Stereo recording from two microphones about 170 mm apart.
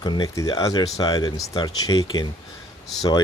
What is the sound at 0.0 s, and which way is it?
Speech, 25° left (ahead or behind).